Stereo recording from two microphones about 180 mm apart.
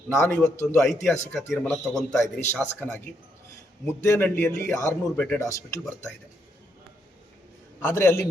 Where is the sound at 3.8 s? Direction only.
15° left (ahead or behind).